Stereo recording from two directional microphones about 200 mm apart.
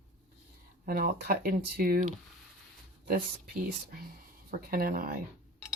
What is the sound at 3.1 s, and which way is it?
Speech, 50° right (ahead or behind).